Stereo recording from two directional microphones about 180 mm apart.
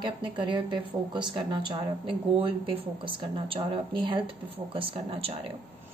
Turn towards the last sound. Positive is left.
turn(degrees=-30)  # may be behind; listen again after turning